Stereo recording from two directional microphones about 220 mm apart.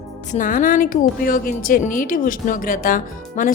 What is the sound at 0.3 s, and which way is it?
Speech, 35° left (ahead or behind).